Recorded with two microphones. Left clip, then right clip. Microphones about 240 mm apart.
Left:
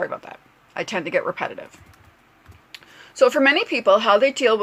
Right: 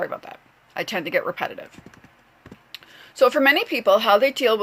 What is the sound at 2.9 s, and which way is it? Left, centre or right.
Speech, centre.